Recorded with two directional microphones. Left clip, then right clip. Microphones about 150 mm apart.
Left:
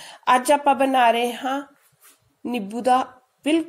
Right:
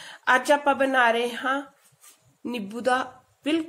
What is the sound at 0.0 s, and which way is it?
A woman's voice, 20° left (ahead or behind).